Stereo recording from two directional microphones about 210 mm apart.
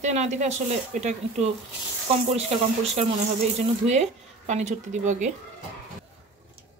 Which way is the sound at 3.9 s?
35° right (ahead or behind).